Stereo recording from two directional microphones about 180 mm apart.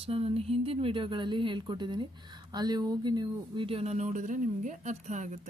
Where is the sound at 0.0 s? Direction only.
35° right (ahead or behind).